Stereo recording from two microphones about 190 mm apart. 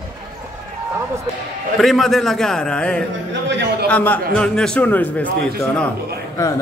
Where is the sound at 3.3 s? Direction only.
70° right (ahead or behind).